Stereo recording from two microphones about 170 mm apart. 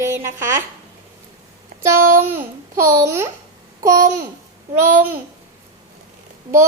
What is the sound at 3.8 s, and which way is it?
Babbling, 20° right (ahead or behind).